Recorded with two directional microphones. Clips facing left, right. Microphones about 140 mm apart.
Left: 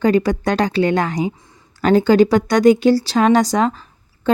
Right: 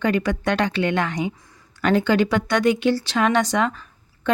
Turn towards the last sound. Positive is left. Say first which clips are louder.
# left 1 dB
turn(degrees=35)  # may be behind; listen again after turning